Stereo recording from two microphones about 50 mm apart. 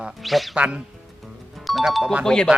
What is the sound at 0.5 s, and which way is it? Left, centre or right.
Speech, right.